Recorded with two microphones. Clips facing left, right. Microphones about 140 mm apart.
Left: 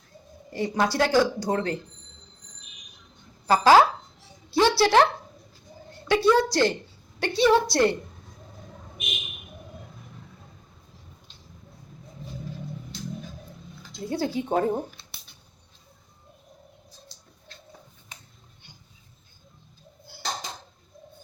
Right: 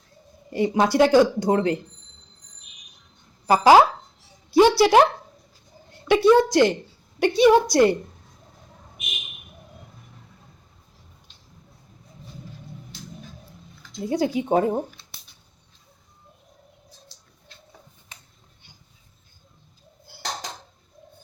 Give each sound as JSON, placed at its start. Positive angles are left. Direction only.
{"t": 0.5, "sound": "speech", "side_deg": -20}
{"t": 3.4, "sound": "speech", "side_deg": -15}
{"t": 4.5, "sound": "a sound", "side_deg": -15}
{"t": 6.1, "sound": "a sound", "side_deg": -20}
{"t": 7.2, "sound": "a woman's voice", "side_deg": -15}
{"t": 14.1, "sound": "a woman's voice", "side_deg": -15}